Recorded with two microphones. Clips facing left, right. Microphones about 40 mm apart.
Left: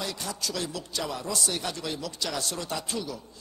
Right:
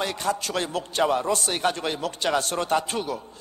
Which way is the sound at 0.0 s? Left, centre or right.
Right.